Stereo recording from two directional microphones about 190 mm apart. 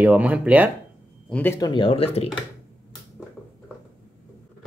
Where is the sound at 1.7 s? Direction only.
25° left (ahead or behind).